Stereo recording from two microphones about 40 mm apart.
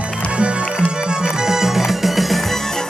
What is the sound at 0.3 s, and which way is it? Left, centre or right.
Music, right.